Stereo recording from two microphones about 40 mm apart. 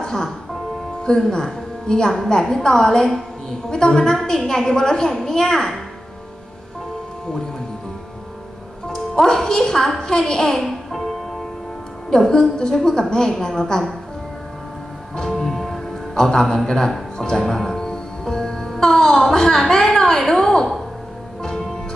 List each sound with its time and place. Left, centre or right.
0.0 s music: centre
1.3 s a woman's voice: centre
8.8 s a woman's voice: centre
12.1 s a woman's voice: centre
15.2 s music: centre
16.2 s a woman's voice: centre
17.2 s music: centre